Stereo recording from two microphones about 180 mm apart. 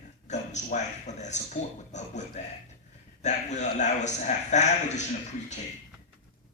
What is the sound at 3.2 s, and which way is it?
A man's voice, 40° left (ahead or behind).